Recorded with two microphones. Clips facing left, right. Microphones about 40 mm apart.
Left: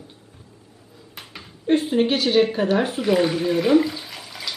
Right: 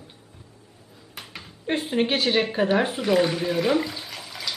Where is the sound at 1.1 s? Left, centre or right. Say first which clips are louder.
Even; centre.